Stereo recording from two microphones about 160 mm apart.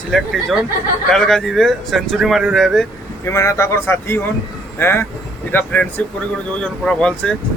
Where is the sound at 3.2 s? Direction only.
15° left (ahead or behind).